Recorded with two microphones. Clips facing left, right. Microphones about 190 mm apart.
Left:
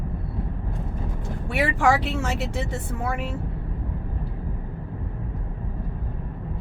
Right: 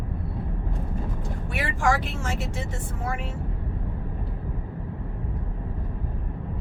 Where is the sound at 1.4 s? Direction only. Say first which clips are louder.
Left 4 dB; 65° left (ahead or behind).